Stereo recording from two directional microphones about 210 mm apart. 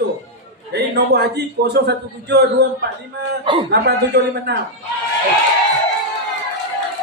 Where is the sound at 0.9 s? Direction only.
50° right (ahead or behind).